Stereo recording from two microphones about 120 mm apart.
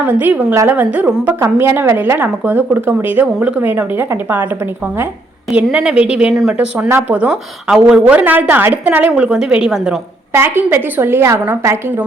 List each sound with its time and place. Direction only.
0.0 s a woman's voice: 15° right (ahead or behind)
5.5 s a woman's voice: 5° right (ahead or behind)
10.3 s a woman's voice: 20° right (ahead or behind)